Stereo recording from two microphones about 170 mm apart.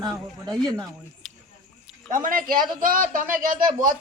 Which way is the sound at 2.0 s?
50° right (ahead or behind).